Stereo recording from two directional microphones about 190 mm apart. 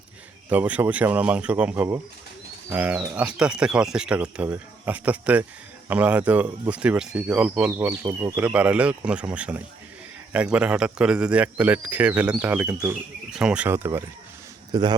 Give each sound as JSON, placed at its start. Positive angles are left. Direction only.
{"t": 0.5, "sound": "a man's voice", "side_deg": -10}